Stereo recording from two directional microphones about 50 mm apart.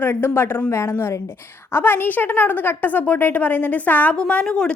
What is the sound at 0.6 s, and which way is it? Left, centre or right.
Speech, left.